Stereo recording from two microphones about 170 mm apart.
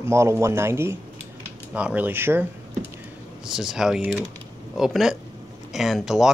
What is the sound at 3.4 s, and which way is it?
Speech, 5° right (ahead or behind).